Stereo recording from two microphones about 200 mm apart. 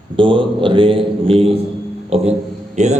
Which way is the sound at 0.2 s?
25° right (ahead or behind).